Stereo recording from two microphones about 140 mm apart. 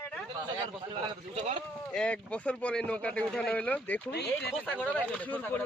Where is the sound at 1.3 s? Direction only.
60° right (ahead or behind).